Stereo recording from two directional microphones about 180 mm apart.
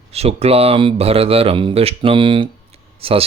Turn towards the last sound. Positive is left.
turn(degrees=-30)  # may be behind; listen again after turning